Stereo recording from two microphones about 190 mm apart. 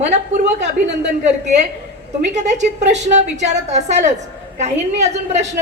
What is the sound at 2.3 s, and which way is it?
A woman's voice, 40° right (ahead or behind).